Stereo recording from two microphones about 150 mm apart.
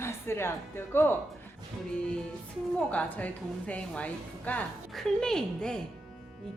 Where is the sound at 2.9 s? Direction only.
10° left (ahead or behind).